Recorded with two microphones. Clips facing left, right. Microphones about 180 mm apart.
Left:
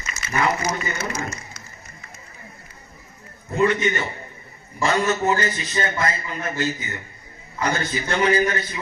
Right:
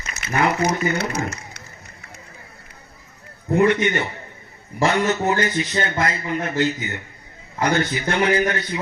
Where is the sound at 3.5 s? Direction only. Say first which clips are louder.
Right 3 dB; 60° right (ahead or behind).